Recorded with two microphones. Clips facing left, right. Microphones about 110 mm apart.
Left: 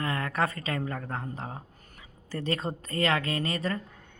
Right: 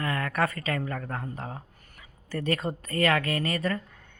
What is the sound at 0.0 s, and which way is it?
Speech, 25° left (ahead or behind).